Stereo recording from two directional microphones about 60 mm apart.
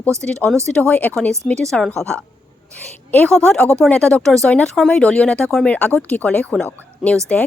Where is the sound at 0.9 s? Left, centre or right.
Left.